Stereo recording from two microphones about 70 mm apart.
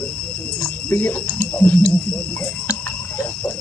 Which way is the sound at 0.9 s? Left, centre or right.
Left.